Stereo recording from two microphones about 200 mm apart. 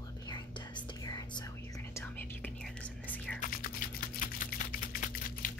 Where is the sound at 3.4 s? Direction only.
45° left (ahead or behind).